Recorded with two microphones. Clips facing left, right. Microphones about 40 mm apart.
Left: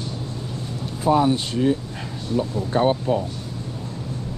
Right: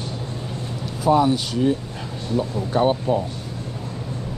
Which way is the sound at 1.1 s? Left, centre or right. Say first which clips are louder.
Right 1 dB; right.